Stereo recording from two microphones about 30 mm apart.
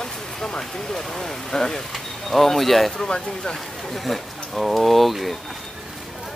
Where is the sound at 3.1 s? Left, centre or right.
Left.